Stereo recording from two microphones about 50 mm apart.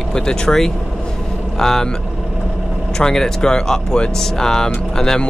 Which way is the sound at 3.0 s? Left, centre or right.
Centre.